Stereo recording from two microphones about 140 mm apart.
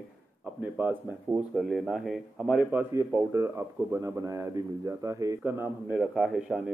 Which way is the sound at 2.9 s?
20° right (ahead or behind).